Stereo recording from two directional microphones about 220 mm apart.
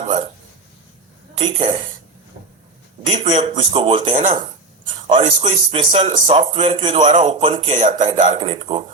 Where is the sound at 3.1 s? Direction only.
25° right (ahead or behind).